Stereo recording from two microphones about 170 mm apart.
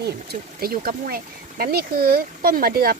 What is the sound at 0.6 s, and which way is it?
Speech, 60° right (ahead or behind).